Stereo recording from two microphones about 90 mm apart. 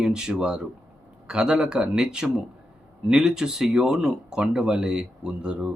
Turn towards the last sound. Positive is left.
turn(degrees=-10)  # may be behind; listen again after turning